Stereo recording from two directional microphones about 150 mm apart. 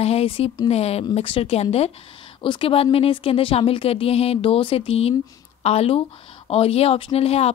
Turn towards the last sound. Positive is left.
turn(degrees=40)  # may be behind; listen again after turning